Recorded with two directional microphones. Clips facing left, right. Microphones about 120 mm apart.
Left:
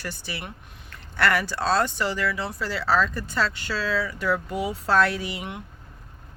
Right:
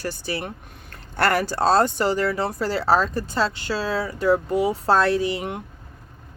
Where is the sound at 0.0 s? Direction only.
40° right (ahead or behind).